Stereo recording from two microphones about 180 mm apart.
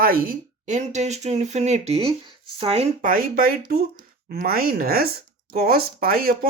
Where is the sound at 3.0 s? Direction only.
50° right (ahead or behind).